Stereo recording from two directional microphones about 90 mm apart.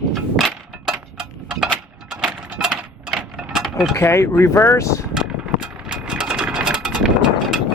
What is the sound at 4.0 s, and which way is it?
Speech, 30° left (ahead or behind).